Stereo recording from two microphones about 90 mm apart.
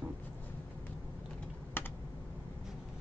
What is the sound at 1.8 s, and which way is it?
Computer keyboard, 25° left (ahead or behind).